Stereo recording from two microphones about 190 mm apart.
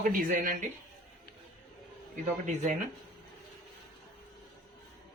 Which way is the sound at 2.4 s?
40° right (ahead or behind).